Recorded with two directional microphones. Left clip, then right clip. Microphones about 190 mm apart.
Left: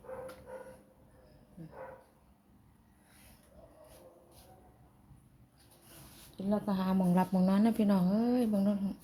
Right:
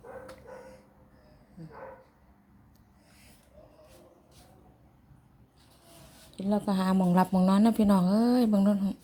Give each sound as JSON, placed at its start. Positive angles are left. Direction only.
{"t": 6.3, "sound": "a woman's voice", "side_deg": -25}